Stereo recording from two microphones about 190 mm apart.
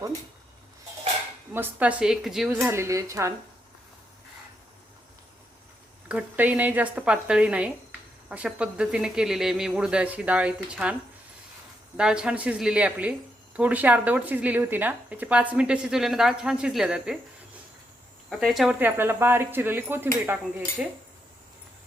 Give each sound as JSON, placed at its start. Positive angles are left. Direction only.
{"t": 1.5, "sound": "speech", "side_deg": -10}
{"t": 2.5, "sound": "speech", "side_deg": -10}
{"t": 6.1, "sound": "speech", "side_deg": -10}
{"t": 11.9, "sound": "speech", "side_deg": -5}
{"t": 18.3, "sound": "speech", "side_deg": 0}